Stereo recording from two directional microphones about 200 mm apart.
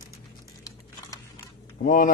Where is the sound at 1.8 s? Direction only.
45° left (ahead or behind).